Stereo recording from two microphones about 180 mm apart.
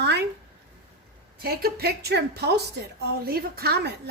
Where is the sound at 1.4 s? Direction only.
60° right (ahead or behind).